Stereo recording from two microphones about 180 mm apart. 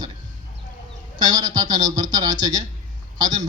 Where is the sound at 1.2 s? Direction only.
20° right (ahead or behind).